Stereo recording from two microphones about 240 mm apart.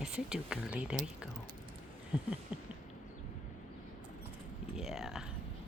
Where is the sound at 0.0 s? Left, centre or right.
Centre.